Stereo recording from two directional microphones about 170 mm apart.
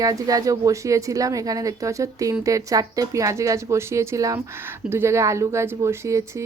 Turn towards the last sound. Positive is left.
turn(degrees=-15)  # may be behind; listen again after turning